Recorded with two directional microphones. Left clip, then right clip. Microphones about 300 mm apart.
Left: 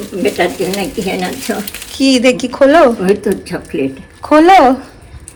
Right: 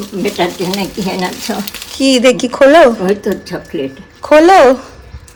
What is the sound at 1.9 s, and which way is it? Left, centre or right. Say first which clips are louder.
Speech: right 1 dB; centre.